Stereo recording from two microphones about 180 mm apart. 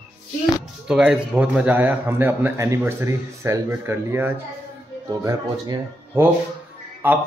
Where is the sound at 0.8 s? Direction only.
5° right (ahead or behind).